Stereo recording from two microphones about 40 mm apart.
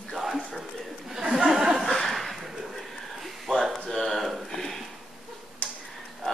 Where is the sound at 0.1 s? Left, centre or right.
Centre.